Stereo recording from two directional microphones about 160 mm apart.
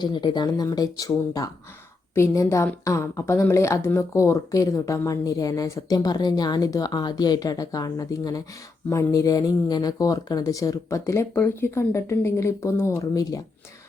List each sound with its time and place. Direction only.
0.0 s a woman's voice: 30° left (ahead or behind)